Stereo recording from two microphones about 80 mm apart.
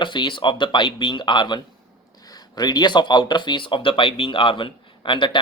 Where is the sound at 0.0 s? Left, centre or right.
Left.